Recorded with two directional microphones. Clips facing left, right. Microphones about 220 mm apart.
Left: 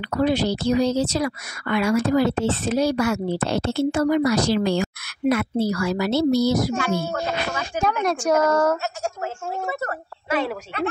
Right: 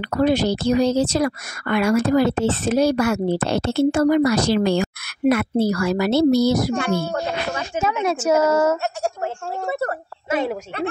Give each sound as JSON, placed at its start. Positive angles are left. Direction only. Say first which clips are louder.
{"t": 0.1, "sound": "speech", "louder": "right 2 dB", "side_deg": -45}
{"t": 6.7, "sound": "speech", "louder": "right 2 dB", "side_deg": 5}
{"t": 8.0, "sound": "a woman's voice", "louder": "right 2 dB", "side_deg": -5}